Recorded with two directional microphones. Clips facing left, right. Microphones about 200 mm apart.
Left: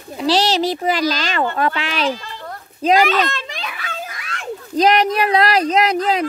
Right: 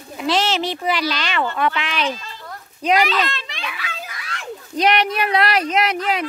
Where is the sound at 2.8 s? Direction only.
45° left (ahead or behind).